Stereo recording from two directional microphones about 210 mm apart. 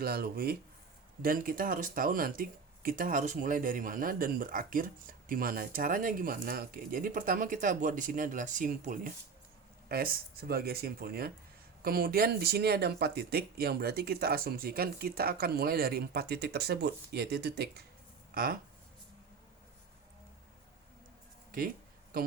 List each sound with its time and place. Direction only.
0.0 s speech: 45° right (ahead or behind)